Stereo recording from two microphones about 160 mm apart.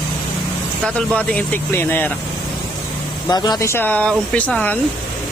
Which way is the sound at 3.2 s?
25° left (ahead or behind).